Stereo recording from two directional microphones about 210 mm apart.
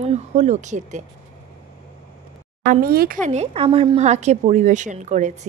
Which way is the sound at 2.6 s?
40° right (ahead or behind).